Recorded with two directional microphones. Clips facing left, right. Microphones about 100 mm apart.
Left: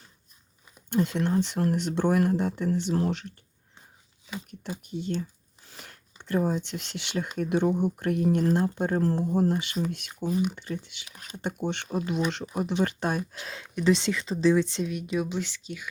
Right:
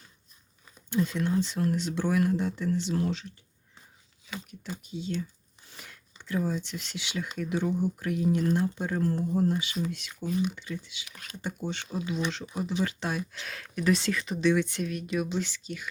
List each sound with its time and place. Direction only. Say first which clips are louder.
0.9 s speech: left 2 dB; 55° left (ahead or behind)
4.3 s a sound: left 2 dB; 20° left (ahead or behind)
4.8 s speech: left 2 dB; 55° left (ahead or behind)
8.4 s speech: left 3 dB; 45° left (ahead or behind)
9.4 s speech: left 2 dB; 55° left (ahead or behind)
13.5 s speech: left 3 dB; 20° left (ahead or behind)